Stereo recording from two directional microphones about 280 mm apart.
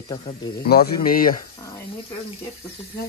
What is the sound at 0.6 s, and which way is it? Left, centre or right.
Speech, left.